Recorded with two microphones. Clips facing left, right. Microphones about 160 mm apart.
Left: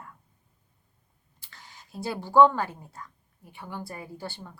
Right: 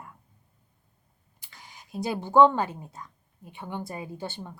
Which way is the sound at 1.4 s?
15° right (ahead or behind).